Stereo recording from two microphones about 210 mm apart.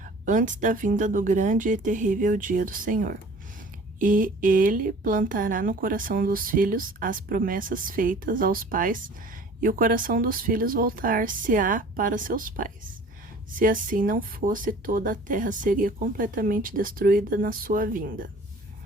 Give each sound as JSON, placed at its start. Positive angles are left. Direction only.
{"t": 0.0, "sound": "speech", "side_deg": -35}